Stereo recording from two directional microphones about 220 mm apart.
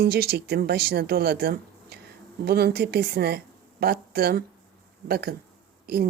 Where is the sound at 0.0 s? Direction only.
45° right (ahead or behind).